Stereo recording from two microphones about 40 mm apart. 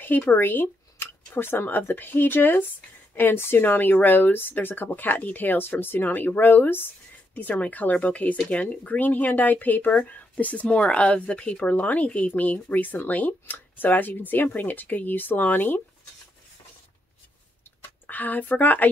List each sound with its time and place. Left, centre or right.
0.2 s speech: left
7.3 s speech: left
18.0 s speech: left